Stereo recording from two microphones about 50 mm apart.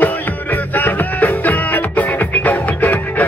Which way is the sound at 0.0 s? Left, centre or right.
Left.